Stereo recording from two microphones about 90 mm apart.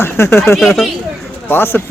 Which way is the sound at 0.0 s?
25° left (ahead or behind).